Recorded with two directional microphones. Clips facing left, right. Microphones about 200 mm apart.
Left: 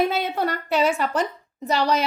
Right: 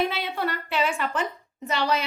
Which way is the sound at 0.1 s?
45° left (ahead or behind).